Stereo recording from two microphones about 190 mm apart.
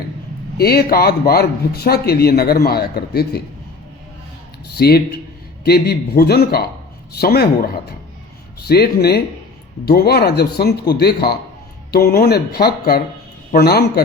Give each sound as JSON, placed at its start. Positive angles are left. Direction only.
{"t": 0.5, "sound": "speech", "side_deg": 55}
{"t": 4.8, "sound": "speech", "side_deg": 55}